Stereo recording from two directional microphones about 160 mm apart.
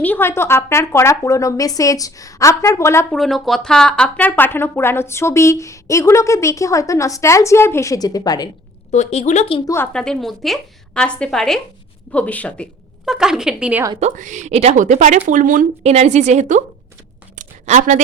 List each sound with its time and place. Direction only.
0.0 s speech: 15° left (ahead or behind)
3.1 s speech: centre (ahead or behind); by 8.4 s 25° left (ahead or behind)
8.9 s speech: 45° left (ahead or behind)
9.6 s speech: 15° left (ahead or behind)
9.9 s speech: 5° left (ahead or behind)
13.1 s speech: 5° right (ahead or behind)
14.0 s a woman's voice: 50° right (ahead or behind)
17.3 s a sound: 50° right (ahead or behind)